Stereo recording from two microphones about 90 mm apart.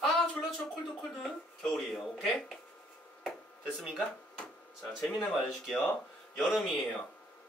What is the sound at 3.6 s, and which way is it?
Speech, 5° right (ahead or behind).